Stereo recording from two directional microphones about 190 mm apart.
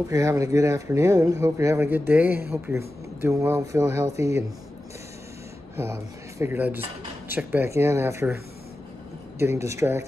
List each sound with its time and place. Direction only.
0.1 s speech: 15° right (ahead or behind)
5.8 s speech: 15° right (ahead or behind)
9.4 s speech: 15° right (ahead or behind)